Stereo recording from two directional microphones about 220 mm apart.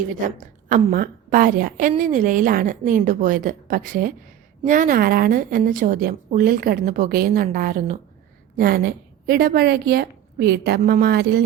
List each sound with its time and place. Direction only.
0.3 s a woman's voice: 35° right (ahead or behind)